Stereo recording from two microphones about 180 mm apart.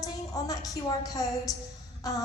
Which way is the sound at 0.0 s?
20° left (ahead or behind).